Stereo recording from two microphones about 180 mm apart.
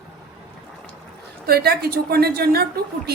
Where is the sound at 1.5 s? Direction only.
60° right (ahead or behind).